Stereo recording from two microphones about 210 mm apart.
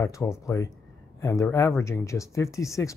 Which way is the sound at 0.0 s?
15° left (ahead or behind).